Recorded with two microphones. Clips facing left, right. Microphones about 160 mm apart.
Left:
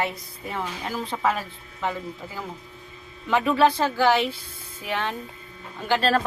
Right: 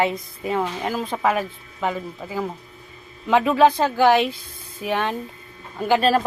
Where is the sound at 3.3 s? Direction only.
15° right (ahead or behind).